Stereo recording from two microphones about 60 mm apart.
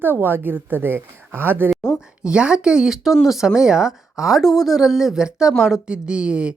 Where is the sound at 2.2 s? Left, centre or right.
Centre.